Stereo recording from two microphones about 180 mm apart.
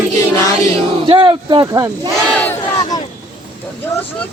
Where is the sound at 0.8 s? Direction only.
30° right (ahead or behind).